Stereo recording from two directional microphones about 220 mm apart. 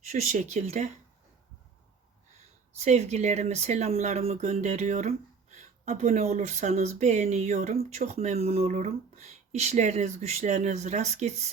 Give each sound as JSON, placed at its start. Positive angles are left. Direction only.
{"t": 0.1, "sound": "speech", "side_deg": -35}
{"t": 2.7, "sound": "speech", "side_deg": -30}